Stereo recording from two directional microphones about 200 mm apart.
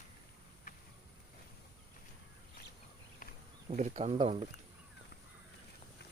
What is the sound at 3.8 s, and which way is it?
Speech, 35° right (ahead or behind).